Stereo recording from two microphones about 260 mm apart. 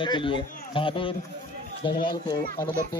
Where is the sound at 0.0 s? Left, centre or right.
Centre.